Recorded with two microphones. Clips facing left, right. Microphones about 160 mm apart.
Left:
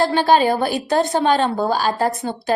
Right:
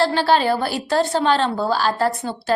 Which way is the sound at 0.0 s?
15° left (ahead or behind).